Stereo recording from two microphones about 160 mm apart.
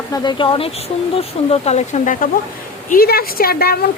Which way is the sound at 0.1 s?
30° left (ahead or behind).